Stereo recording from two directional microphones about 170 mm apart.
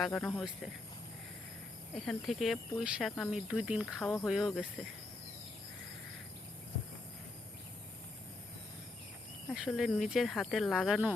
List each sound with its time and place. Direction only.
0.0 s speech: 5° left (ahead or behind)
2.0 s speech: centre (ahead or behind)
9.5 s speech: centre (ahead or behind)